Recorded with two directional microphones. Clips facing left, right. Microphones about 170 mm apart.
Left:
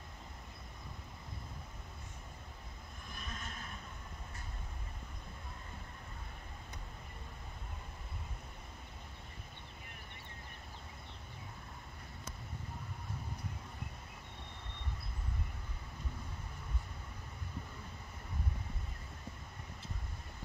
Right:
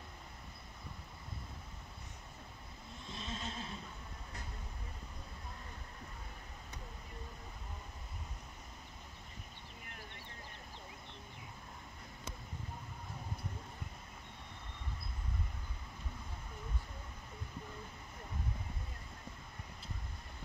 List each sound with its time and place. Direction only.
3.1 s neigh: 25° right (ahead or behind)